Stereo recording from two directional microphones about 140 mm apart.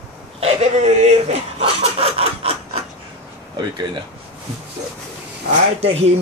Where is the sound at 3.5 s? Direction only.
30° right (ahead or behind).